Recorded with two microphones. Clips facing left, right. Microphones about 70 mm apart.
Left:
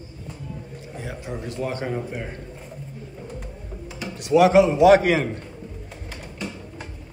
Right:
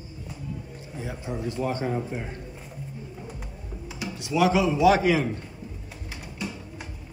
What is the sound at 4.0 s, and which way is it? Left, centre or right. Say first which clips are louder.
Speech: left 7 dB; left.